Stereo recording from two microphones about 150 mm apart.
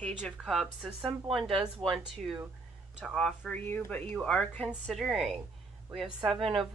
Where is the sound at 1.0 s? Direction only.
35° right (ahead or behind).